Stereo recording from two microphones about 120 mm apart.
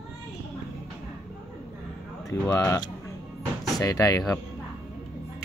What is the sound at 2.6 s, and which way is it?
Speech, 30° left (ahead or behind).